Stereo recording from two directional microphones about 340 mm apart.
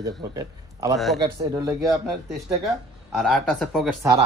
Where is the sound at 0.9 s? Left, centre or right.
Centre.